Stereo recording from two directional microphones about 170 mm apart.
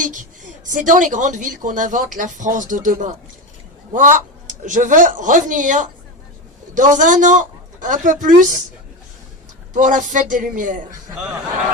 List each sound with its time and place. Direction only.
0.0 s a man's voice: 50° right (ahead or behind)
9.7 s a man's voice: 50° right (ahead or behind)